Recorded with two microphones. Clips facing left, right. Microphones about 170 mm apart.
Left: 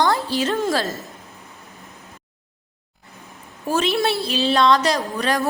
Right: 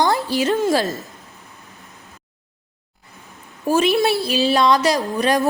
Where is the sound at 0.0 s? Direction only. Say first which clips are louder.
Right 1 dB; 10° right (ahead or behind).